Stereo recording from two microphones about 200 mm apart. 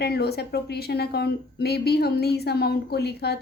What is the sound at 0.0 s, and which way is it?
A woman's voice, 55° left (ahead or behind).